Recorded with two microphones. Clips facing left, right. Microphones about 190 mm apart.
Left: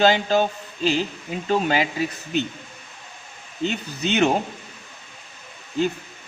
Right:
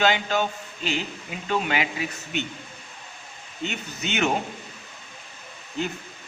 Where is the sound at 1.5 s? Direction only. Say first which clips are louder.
Left 4 dB; 35° left (ahead or behind).